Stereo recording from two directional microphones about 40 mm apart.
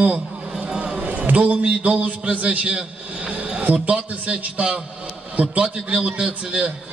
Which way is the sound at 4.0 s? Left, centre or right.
Right.